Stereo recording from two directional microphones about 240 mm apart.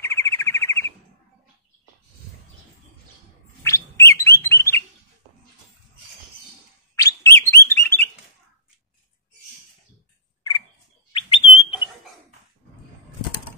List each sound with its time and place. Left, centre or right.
0.0 s bird: centre
3.6 s bird: centre
7.2 s chirp: centre
11.1 s bird: left